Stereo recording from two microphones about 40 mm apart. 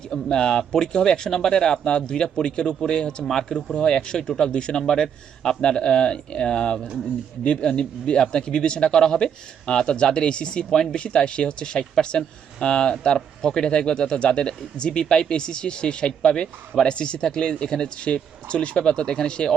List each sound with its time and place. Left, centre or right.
0.1 s a man's voice: centre
4.8 s a man's voice: centre; by 8.9 s left
8.9 s speech: centre
10.7 s a man's voice: centre
10.9 s speech: left